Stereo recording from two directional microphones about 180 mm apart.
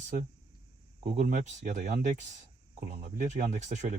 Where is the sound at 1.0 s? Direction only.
40° right (ahead or behind).